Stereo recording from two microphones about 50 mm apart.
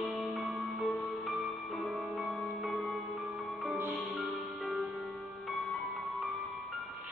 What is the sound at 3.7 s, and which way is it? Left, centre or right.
Music, right.